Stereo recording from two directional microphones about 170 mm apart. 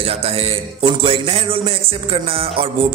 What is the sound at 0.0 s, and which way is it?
A man's voice, 35° right (ahead or behind).